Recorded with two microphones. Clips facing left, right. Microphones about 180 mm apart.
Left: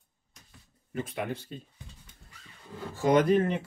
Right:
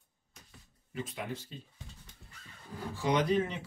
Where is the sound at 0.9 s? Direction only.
60° left (ahead or behind).